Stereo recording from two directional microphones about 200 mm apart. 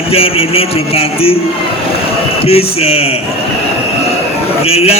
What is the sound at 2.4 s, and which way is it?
Speech, 30° left (ahead or behind).